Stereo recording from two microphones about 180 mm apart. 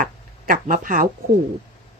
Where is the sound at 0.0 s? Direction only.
50° right (ahead or behind).